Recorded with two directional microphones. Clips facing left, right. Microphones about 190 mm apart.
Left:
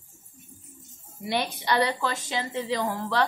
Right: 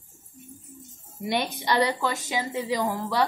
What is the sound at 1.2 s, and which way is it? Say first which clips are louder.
A woman's voice: right 1 dB; 15° right (ahead or behind).